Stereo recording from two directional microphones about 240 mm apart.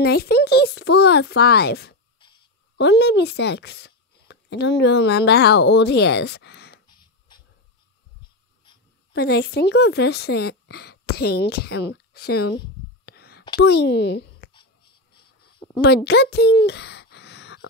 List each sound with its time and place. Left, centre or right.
0.0 s a child's voice: left
6.9 s a sound: centre
8.7 s writing: centre
9.1 s a woman's voice: left
13.0 s a sound: left
13.6 s a child's voice: left
15.8 s speech: left